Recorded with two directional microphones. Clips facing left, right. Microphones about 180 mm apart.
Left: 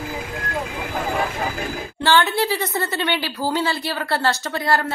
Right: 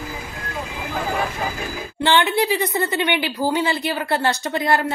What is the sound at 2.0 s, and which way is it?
A woman's voice, 15° right (ahead or behind).